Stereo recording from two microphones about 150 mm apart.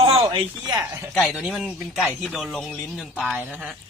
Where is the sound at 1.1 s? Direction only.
Centre (ahead or behind).